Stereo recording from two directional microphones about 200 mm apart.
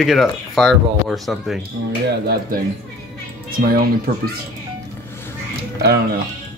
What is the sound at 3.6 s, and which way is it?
Speech, 45° right (ahead or behind).